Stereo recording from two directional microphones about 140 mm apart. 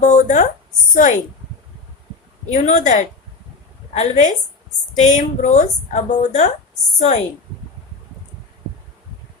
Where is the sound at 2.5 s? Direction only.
55° left (ahead or behind).